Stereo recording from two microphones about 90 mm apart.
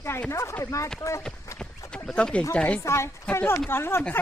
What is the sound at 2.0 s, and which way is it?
Speech, 10° left (ahead or behind).